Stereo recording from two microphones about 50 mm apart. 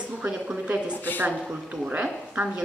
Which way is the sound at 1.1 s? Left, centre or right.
Left.